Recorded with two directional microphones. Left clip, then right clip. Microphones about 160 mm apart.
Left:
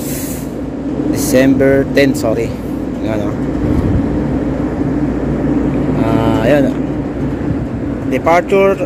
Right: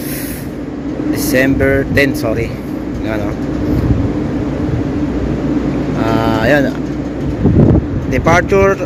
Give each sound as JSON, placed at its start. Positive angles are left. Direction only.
{"t": 1.3, "sound": "speech", "side_deg": 20}
{"t": 6.0, "sound": "a sound", "side_deg": 0}
{"t": 8.1, "sound": "speech", "side_deg": 5}